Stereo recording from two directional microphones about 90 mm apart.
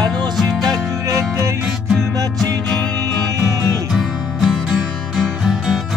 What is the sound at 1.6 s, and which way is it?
Music, centre (ahead or behind).